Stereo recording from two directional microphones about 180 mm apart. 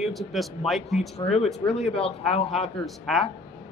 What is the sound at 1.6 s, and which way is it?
Speech, 35° left (ahead or behind).